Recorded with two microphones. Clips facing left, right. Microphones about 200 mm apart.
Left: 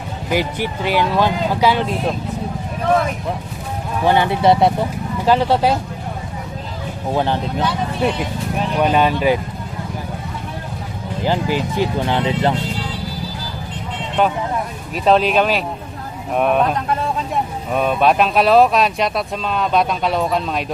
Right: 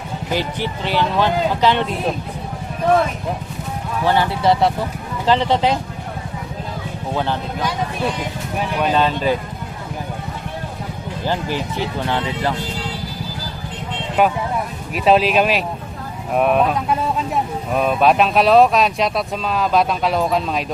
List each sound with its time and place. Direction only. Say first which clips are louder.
0.3 s speech: left 3 dB; 10° left (ahead or behind)
4.0 s speech: left 3 dB; 20° left (ahead or behind)
5.2 s speech: left 1 dB; 10° left (ahead or behind)
7.1 s speech: left 3 dB; 15° left (ahead or behind)
8.8 s speech: left 3 dB; 15° left (ahead or behind)
11.2 s speech: left 4 dB; 15° left (ahead or behind)
14.2 s speech: right 1 dB; 10° right (ahead or behind)